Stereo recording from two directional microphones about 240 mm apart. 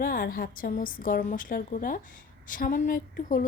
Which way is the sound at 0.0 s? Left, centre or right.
Left.